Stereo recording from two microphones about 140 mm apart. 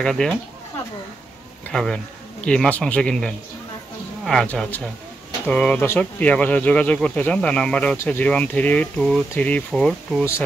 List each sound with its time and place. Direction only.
0.0 s speech: 5° left (ahead or behind)
1.7 s speech: 5° left (ahead or behind)